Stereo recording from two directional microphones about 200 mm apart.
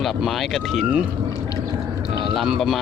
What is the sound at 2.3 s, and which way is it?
Speech, centre (ahead or behind).